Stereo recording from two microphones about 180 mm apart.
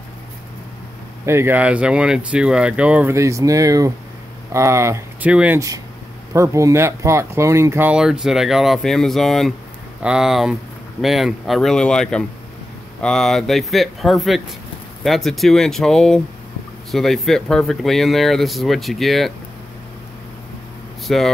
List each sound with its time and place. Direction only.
1.2 s speech: 15° right (ahead or behind)
21.1 s speech: centre (ahead or behind)